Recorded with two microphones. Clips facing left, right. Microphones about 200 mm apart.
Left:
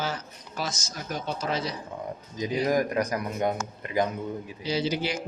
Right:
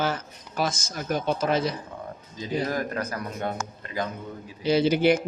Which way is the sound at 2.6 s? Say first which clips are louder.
Left 4 dB; 15° left (ahead or behind).